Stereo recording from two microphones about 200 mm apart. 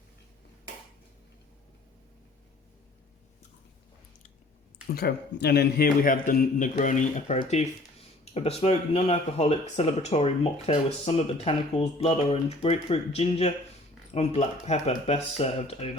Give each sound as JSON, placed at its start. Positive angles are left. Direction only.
{"t": 4.9, "sound": "a man's voice", "side_deg": 55}